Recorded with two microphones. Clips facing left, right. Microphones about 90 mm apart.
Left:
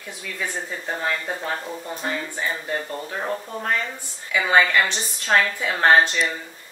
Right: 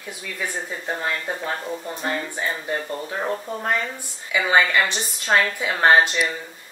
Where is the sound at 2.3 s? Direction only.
10° right (ahead or behind).